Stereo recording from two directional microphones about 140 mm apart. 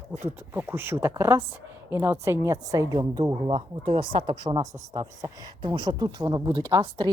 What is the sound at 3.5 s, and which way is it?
Speech, 40° right (ahead or behind).